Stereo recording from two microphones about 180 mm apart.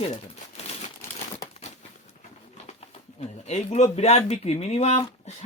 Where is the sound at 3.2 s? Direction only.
40° left (ahead or behind).